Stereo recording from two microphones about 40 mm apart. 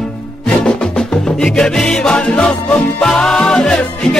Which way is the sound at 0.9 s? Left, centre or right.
Centre.